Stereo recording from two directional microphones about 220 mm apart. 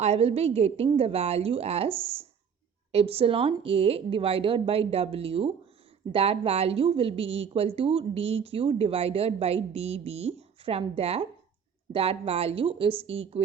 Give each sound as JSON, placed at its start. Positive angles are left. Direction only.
{"t": 0.0, "sound": "a woman's voice", "side_deg": -30}